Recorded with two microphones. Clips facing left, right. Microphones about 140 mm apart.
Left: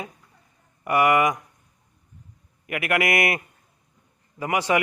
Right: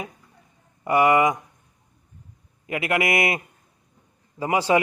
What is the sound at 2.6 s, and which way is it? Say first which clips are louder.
A man's voice: even; 25° right (ahead or behind).